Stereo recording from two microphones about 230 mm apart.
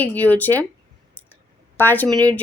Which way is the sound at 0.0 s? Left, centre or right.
Centre.